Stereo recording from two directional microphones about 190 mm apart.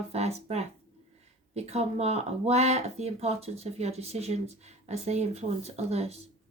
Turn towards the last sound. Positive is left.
turn(degrees=-35)  # may be behind; listen again after turning